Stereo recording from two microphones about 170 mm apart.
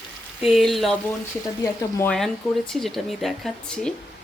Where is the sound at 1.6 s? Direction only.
15° left (ahead or behind).